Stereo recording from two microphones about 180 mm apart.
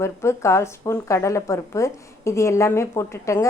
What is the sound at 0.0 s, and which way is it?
A woman's voice, 15° left (ahead or behind).